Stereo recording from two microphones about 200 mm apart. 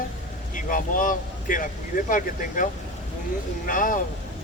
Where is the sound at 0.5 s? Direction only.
45° left (ahead or behind).